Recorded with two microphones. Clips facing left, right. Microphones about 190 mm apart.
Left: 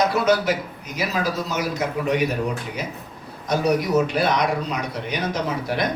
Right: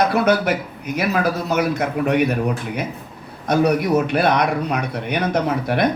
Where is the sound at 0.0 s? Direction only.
60° right (ahead or behind).